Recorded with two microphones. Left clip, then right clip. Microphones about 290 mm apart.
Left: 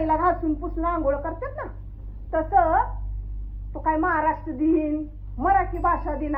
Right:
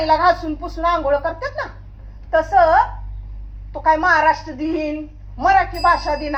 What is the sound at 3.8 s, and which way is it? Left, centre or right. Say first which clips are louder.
A woman's voice: right 8 dB; right.